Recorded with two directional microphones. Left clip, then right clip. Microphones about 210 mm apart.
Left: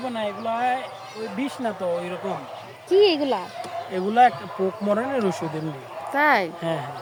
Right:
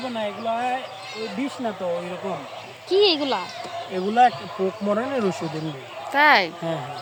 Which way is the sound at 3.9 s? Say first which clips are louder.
Even; 5° left (ahead or behind).